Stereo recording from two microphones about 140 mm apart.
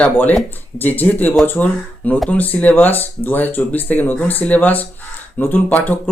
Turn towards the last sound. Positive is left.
turn(degrees=15)  # may be behind; listen again after turning